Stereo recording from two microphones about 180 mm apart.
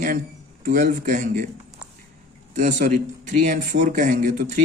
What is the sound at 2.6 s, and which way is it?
A man's voice, 45° right (ahead or behind).